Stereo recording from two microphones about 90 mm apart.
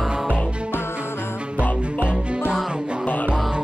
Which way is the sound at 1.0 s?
25° left (ahead or behind).